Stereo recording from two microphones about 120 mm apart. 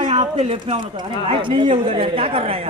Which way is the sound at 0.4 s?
60° right (ahead or behind).